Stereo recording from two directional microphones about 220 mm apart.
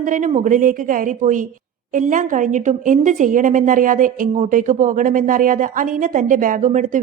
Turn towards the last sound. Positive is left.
turn(degrees=-35)  # may be behind; listen again after turning